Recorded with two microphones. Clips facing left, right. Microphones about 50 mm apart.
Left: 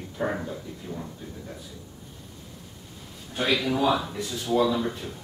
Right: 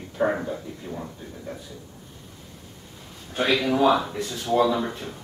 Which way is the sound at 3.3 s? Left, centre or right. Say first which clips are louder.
Right 3 dB; centre.